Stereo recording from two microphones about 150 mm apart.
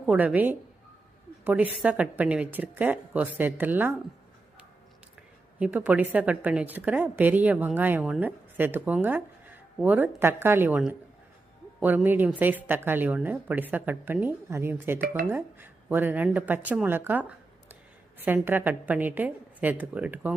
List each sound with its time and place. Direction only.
0.0 s a woman's voice: 5° right (ahead or behind)
5.5 s a woman's voice: 10° right (ahead or behind)
15.0 s speech: 65° right (ahead or behind)
15.3 s a woman's voice: 15° right (ahead or behind)